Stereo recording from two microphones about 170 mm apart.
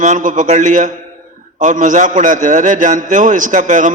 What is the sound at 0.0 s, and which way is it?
A man's voice, 45° right (ahead or behind).